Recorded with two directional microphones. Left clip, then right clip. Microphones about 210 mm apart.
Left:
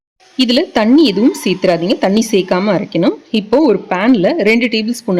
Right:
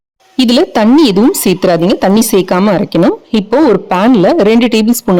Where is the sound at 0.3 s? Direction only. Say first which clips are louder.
Right 3 dB; 40° right (ahead or behind).